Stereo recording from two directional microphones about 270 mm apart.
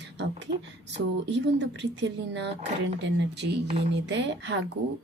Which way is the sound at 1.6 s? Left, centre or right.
Right.